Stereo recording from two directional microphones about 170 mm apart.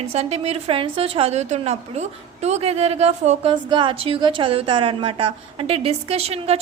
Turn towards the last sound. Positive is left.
turn(degrees=-35)  # may be behind; listen again after turning